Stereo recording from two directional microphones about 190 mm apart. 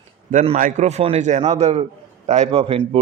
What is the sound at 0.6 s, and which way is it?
A man's voice, 35° right (ahead or behind).